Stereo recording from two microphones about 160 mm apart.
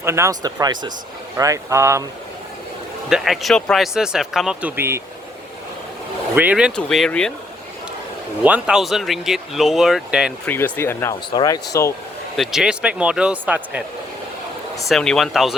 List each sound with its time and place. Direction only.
0.0 s speech: 15° right (ahead or behind)
3.1 s speech: centre (ahead or behind)
4.8 s speech: 15° right (ahead or behind)
6.3 s speech: 10° right (ahead or behind)
8.4 s speech: 10° right (ahead or behind)
10.5 s speech: 15° left (ahead or behind)
11.3 s speech: 25° left (ahead or behind)
12.4 s speech: centre (ahead or behind)
14.8 s speech: 5° left (ahead or behind)